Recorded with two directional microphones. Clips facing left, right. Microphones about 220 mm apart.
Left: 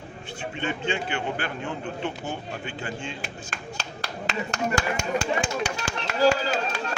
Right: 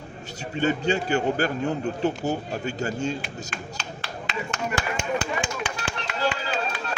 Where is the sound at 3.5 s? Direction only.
40° left (ahead or behind).